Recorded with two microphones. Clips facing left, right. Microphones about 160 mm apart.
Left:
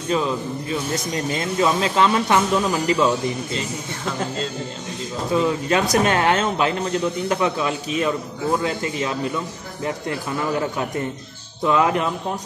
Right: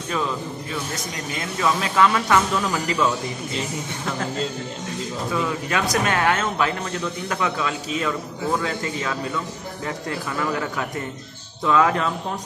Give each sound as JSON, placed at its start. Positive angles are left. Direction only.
{"t": 1.3, "sound": "a man's voice", "side_deg": 30}
{"t": 5.3, "sound": "a man's voice", "side_deg": 25}
{"t": 9.8, "sound": "a man's voice", "side_deg": 25}